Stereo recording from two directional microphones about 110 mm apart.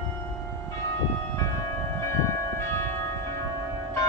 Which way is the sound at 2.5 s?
25° left (ahead or behind).